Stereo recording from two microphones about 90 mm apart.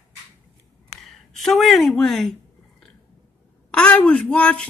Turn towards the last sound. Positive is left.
turn(degrees=10)  # may be behind; listen again after turning